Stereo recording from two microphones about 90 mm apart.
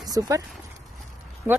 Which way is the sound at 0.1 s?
45° right (ahead or behind).